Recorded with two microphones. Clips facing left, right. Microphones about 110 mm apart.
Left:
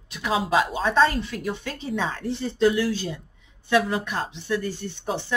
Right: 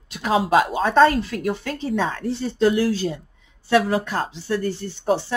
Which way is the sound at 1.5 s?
35° right (ahead or behind).